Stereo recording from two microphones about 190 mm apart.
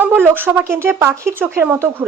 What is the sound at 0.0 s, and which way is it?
Speech, 10° right (ahead or behind).